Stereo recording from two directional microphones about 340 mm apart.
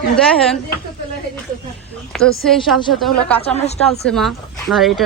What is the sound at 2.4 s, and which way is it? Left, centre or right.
Speech, centre.